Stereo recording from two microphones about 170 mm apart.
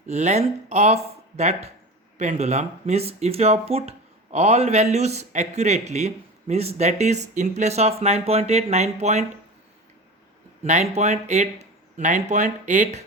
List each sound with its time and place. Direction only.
0.1 s speech: 40° right (ahead or behind)
10.6 s speech: 40° right (ahead or behind)